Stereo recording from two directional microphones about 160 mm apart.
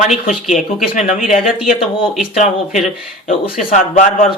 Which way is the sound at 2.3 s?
45° left (ahead or behind).